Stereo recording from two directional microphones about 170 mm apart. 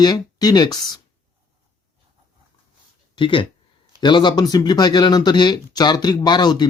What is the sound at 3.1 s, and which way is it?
Speech, 30° left (ahead or behind).